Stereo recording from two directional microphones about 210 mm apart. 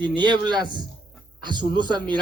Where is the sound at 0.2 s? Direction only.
20° right (ahead or behind).